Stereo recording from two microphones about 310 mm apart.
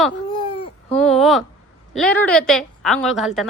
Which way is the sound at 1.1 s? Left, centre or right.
Centre.